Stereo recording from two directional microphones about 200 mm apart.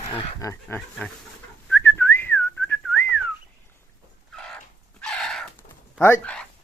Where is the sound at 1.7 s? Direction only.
10° left (ahead or behind).